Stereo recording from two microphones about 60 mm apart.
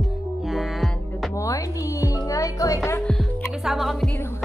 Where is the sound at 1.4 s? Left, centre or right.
Left.